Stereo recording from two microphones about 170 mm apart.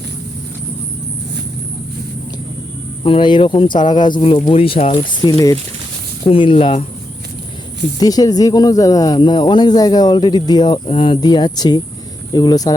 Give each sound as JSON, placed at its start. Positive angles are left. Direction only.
{"t": 3.0, "sound": "speech", "side_deg": 30}
{"t": 6.2, "sound": "speech", "side_deg": 30}
{"t": 7.9, "sound": "speech", "side_deg": 20}